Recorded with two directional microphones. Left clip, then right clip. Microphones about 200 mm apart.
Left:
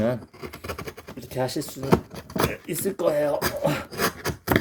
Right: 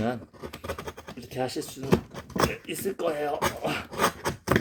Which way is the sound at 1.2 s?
55° left (ahead or behind).